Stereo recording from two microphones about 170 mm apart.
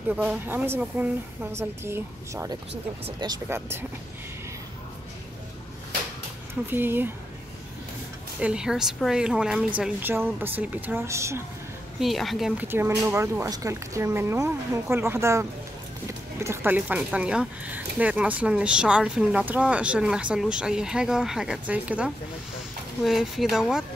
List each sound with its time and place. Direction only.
0.1 s speech: 10° right (ahead or behind)
6.7 s speech: 10° right (ahead or behind)
8.4 s speech: 5° right (ahead or behind)
12.0 s speech: centre (ahead or behind)
12.6 s speech: 15° right (ahead or behind)